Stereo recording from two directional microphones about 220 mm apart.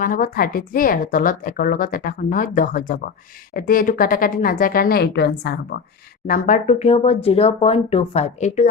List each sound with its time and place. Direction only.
0.0 s a woman's voice: 40° left (ahead or behind)
6.2 s speech: 35° left (ahead or behind)